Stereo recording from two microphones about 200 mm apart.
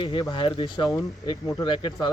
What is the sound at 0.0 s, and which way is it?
Speech, 20° left (ahead or behind).